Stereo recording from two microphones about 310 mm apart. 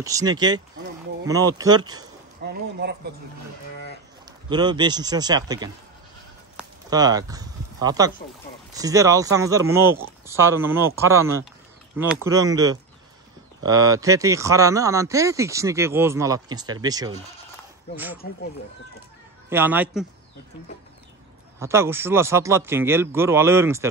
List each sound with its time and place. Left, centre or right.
0.0 s speech: centre
2.4 s a sound: right
4.5 s speech: centre
6.5 s a sound: centre
8.7 s speech: centre
12.3 s speech: centre
18.2 s speech: left
19.5 s a man's voice: centre
21.5 s speech: centre